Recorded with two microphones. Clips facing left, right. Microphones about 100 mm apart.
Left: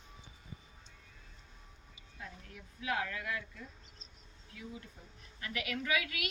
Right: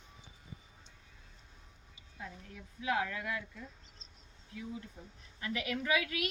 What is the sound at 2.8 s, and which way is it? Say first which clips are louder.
A woman's voice: right 2 dB; 20° right (ahead or behind).